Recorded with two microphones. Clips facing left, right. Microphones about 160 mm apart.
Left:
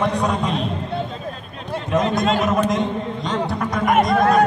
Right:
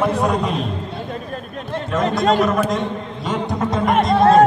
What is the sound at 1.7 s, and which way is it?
Run, 10° left (ahead or behind).